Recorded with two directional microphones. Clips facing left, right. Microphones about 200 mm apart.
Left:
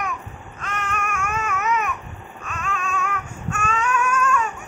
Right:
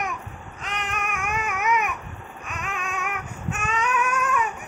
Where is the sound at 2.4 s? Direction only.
15° right (ahead or behind).